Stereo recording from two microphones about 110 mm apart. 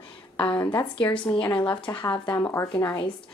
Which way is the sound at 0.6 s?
40° left (ahead or behind).